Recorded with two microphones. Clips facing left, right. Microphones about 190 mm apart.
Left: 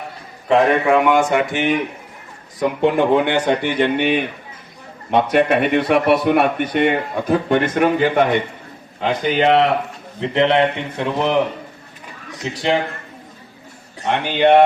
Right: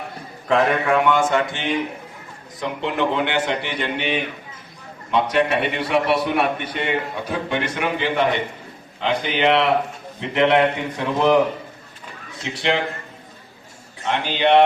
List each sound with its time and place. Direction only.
0.4 s speech: 5° left (ahead or behind)
2.6 s a man's voice: 45° left (ahead or behind); by 10.6 s 30° left (ahead or behind)
10.9 s speech: 20° left (ahead or behind)
12.4 s a man's voice: 40° left (ahead or behind)
14.1 s a man's voice: 55° left (ahead or behind)